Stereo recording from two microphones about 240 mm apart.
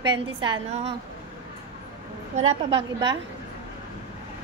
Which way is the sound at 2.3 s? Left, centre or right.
Right.